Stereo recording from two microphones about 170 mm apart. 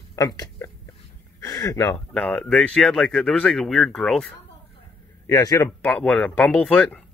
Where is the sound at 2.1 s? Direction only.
5° left (ahead or behind).